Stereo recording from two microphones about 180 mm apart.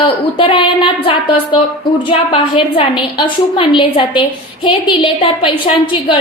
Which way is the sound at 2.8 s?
30° left (ahead or behind).